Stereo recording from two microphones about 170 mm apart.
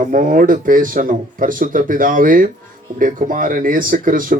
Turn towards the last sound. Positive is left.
turn(degrees=-50)  # may be behind; listen again after turning